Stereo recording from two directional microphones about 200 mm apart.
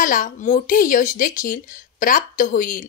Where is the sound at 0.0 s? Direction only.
40° left (ahead or behind).